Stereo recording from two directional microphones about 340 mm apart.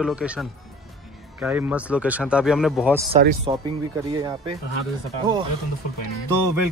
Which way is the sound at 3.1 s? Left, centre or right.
Right.